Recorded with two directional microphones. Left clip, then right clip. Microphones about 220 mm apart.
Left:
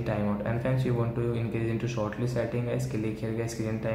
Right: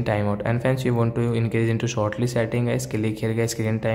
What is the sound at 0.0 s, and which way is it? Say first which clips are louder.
Speech: right 7 dB; 45° right (ahead or behind).